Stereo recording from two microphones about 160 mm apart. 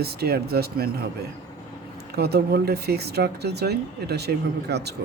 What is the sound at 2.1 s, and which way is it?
Speech, 80° right.